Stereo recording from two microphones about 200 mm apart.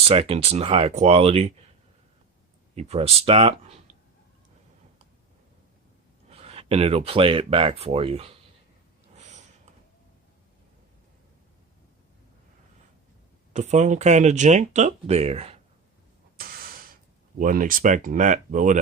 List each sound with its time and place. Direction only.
0.1 s speech: 30° right (ahead or behind)
2.7 s speech: 30° right (ahead or behind)
6.3 s speech: 30° right (ahead or behind)
13.5 s speech: 35° right (ahead or behind)
16.4 s a sound: 45° right (ahead or behind)
17.4 s speech: 40° right (ahead or behind)